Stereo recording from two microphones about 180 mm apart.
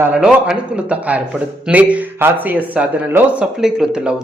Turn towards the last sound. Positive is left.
turn(degrees=-5)  # may be behind; listen again after turning